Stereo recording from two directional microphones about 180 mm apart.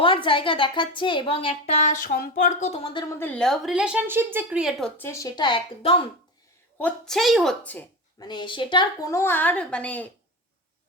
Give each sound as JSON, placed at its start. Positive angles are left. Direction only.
{"t": 0.0, "sound": "a woman's voice", "side_deg": 30}
{"t": 3.2, "sound": "a woman's voice", "side_deg": 5}
{"t": 4.9, "sound": "a woman's voice", "side_deg": 15}
{"t": 6.7, "sound": "a woman's voice", "side_deg": 5}
{"t": 8.2, "sound": "a woman's voice", "side_deg": 25}